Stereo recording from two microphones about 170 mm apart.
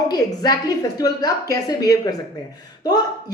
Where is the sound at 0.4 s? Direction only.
20° left (ahead or behind).